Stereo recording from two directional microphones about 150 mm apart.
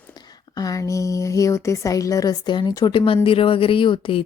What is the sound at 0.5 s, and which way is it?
Speech, 25° left (ahead or behind).